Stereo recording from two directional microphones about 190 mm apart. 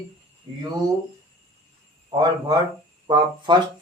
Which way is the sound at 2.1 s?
20° right (ahead or behind).